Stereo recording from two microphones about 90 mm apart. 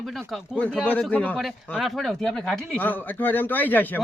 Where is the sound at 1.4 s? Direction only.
Centre (ahead or behind).